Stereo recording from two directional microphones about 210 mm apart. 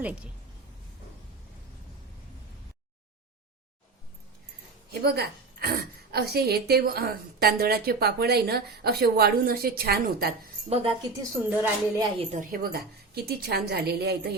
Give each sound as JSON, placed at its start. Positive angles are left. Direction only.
{"t": 0.0, "sound": "music", "side_deg": -5}
{"t": 4.9, "sound": "a woman's voice", "side_deg": -50}
{"t": 10.7, "sound": "a woman's voice", "side_deg": -30}
{"t": 11.2, "sound": "music", "side_deg": -10}
{"t": 12.2, "sound": "a woman's voice", "side_deg": -35}